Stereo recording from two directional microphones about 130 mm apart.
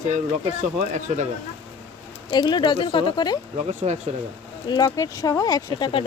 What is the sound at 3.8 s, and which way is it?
Speech, 55° right (ahead or behind).